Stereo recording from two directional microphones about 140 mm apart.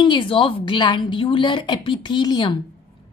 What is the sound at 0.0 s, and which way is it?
A woman's voice, 35° left (ahead or behind).